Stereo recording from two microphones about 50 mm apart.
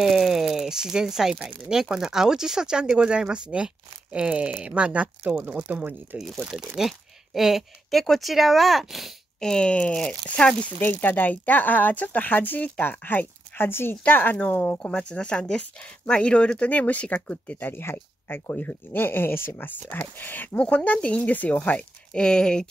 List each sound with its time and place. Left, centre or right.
0.0 s speech: centre; by 5.1 s right
5.2 s speech: right
6.8 s speech: centre
9.4 s speech: centre
10.8 s speech: left
15.0 s speech: left
17.6 s speech: left
19.6 s speech: left
20.5 s speech: left
21.3 s speech: left
22.1 s speech: centre